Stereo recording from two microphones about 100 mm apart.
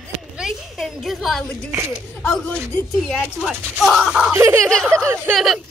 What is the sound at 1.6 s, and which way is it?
Speech, 25° right (ahead or behind).